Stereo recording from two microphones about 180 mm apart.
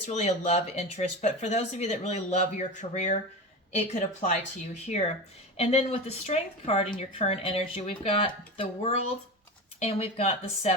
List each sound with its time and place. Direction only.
0.1 s speech: 40° left (ahead or behind)